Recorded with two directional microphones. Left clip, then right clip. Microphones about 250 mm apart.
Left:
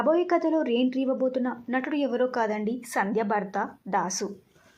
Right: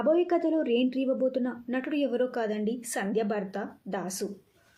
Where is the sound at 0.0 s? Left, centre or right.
Centre.